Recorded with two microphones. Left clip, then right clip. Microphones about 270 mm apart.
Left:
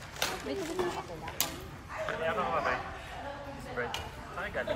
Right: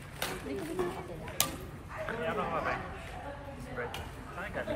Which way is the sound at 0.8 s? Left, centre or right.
Left.